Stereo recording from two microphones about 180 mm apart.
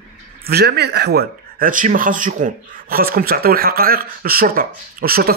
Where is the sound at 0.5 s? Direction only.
60° right (ahead or behind).